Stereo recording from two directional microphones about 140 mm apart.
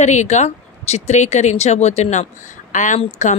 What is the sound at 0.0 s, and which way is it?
Speech, 55° left (ahead or behind).